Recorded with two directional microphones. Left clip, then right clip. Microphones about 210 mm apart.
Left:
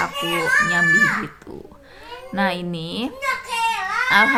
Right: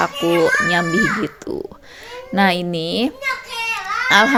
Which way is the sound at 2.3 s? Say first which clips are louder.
Right 6 dB; 30° right (ahead or behind).